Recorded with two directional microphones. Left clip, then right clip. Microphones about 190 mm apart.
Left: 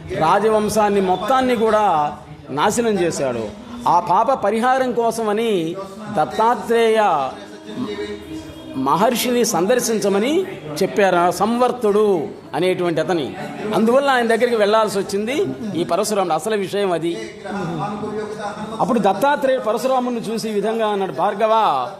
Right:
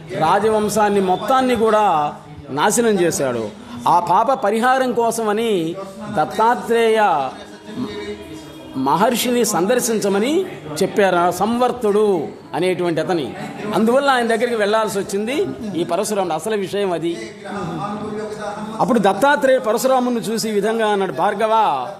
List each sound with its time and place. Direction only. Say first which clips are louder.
0.1 s a man's voice: even; centre (ahead or behind)
8.8 s a man's voice: even; 5° right (ahead or behind)
14.3 s a man's voice: left 2 dB; 10° left (ahead or behind)
18.8 s a man's voice: right 1 dB; 15° right (ahead or behind); by 21.8 s centre (ahead or behind)